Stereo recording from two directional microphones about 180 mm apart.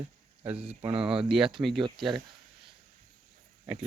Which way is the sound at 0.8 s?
25° right (ahead or behind).